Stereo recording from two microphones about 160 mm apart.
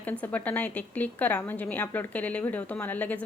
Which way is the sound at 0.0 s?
10° left (ahead or behind).